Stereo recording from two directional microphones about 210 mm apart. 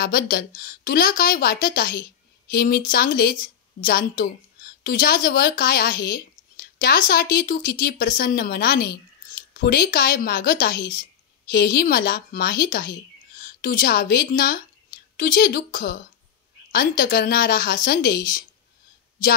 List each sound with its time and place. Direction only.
0.0 s speech: 45° left (ahead or behind)